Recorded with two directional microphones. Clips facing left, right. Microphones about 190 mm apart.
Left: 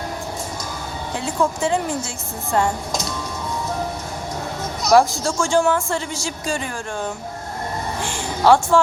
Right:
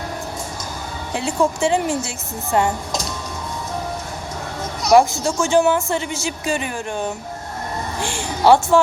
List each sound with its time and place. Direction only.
1.4 s speech: 25° right (ahead or behind)
4.9 s speech: 15° right (ahead or behind)
8.4 s speech: 20° right (ahead or behind)